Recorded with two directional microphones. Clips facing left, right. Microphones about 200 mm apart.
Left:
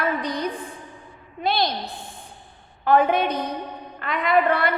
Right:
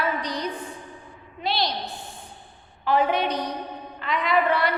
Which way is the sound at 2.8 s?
50° left (ahead or behind).